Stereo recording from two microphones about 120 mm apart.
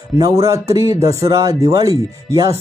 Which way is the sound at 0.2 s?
30° right (ahead or behind).